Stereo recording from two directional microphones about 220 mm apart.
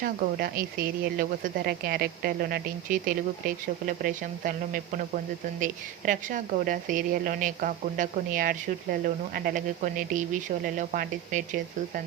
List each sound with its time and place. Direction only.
0.0 s speech: 40° right (ahead or behind)